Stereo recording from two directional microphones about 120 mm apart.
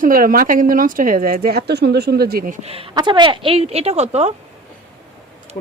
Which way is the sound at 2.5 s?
55° right (ahead or behind).